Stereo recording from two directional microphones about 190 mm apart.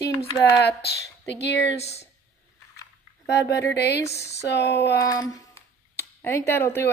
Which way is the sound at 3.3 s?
65° left (ahead or behind).